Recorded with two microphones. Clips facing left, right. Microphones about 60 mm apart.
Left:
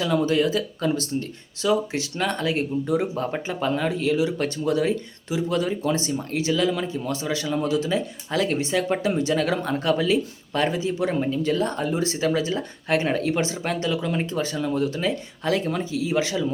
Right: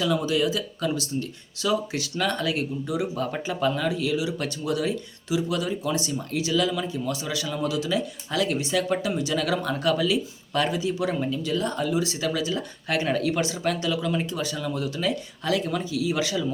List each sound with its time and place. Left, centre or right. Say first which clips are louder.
0.0 s speech: left 2 dB; left